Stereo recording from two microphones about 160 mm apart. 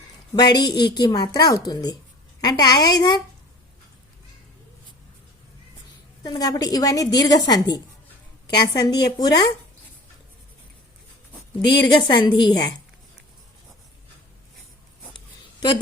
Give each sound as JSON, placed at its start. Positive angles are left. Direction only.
{"t": 0.3, "sound": "a woman's voice", "side_deg": 25}
{"t": 6.2, "sound": "a woman's voice", "side_deg": 25}
{"t": 11.6, "sound": "a woman's voice", "side_deg": 90}
{"t": 11.9, "sound": "a woman's voice", "side_deg": 30}